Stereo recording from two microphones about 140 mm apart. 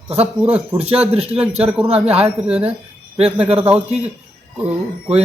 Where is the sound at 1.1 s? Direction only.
45° right (ahead or behind).